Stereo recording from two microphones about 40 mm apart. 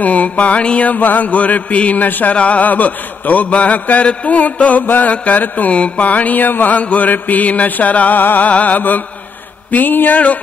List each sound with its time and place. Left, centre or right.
0.0 s mantra: left
0.9 s mantra: left
2.3 s mantra: left
4.8 s mantra: left
5.1 s mantra: left
8.2 s mantra: left
8.5 s mantra: left
10.1 s mantra: left